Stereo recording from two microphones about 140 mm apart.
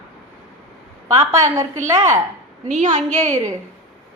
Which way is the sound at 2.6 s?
60° right (ahead or behind).